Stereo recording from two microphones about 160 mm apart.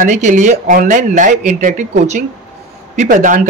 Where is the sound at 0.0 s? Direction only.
50° right (ahead or behind).